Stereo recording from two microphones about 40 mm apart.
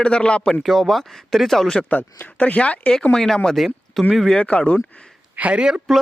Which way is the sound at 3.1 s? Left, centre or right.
Centre.